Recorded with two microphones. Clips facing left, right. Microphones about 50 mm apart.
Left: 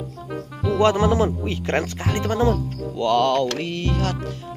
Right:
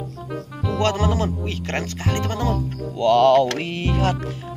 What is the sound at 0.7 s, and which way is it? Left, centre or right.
Music, centre.